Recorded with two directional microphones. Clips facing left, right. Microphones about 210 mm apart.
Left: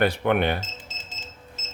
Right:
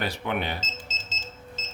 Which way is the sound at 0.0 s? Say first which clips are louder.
Left 8 dB; 60° left (ahead or behind).